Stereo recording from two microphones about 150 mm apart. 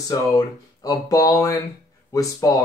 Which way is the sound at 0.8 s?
25° left (ahead or behind).